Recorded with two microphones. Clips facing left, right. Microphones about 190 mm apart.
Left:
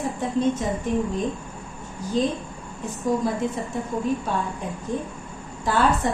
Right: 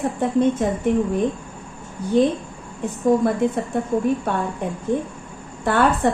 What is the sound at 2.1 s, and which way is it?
Speech, 60° right (ahead or behind).